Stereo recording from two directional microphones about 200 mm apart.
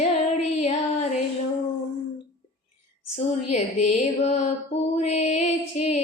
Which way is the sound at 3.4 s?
35° left (ahead or behind).